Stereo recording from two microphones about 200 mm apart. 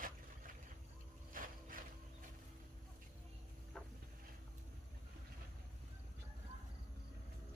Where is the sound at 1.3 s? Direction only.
45° right (ahead or behind).